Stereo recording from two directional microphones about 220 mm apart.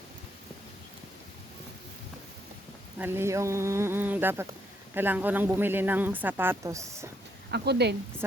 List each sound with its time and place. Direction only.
3.0 s speech: 10° right (ahead or behind)
7.5 s a woman's voice: 50° right (ahead or behind)